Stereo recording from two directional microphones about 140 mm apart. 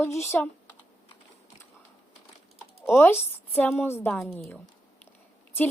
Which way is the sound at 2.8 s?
15° left (ahead or behind).